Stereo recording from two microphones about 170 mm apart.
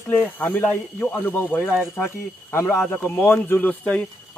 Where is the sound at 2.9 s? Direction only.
15° left (ahead or behind).